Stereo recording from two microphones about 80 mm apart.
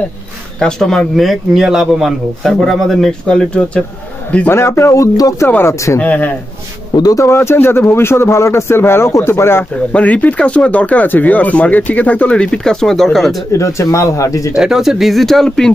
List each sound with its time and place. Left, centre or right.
0.6 s a man's voice: centre
4.5 s speech: left
5.9 s a man's voice: centre
6.9 s speech: left
7.2 s speech: left
9.9 s speech: centre
13.5 s speech: left
14.5 s a man's voice: centre